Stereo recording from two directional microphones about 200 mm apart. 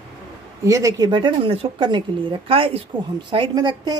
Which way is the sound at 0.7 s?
15° right (ahead or behind).